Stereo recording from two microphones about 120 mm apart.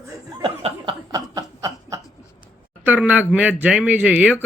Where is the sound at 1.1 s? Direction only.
30° right (ahead or behind).